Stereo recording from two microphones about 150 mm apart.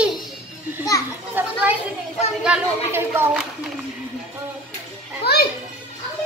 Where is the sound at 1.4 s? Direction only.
10° right (ahead or behind).